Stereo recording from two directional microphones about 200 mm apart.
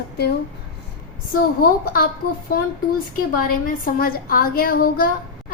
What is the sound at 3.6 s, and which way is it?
A woman's voice, 45° left (ahead or behind).